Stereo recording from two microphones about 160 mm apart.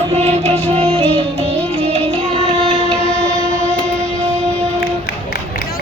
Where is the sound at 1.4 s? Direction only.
40° right (ahead or behind).